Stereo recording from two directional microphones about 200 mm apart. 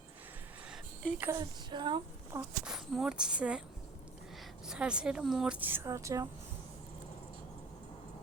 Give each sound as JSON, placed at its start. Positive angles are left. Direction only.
{"t": 1.2, "sound": "a woman's voice", "side_deg": -20}
{"t": 2.4, "sound": "a woman's voice", "side_deg": -5}
{"t": 4.6, "sound": "a woman's voice", "side_deg": -5}